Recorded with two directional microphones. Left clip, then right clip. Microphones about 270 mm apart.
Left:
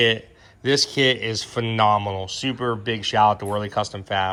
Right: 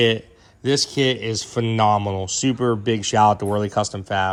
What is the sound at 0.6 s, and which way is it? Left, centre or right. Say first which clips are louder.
Speech: left 1 dB; centre.